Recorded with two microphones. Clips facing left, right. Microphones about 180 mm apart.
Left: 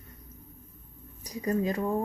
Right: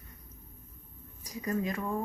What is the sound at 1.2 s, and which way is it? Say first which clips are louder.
Speech: left 4 dB; 30° left (ahead or behind).